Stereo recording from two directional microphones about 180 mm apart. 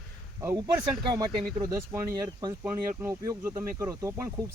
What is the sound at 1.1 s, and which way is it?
Speech, 20° right (ahead or behind).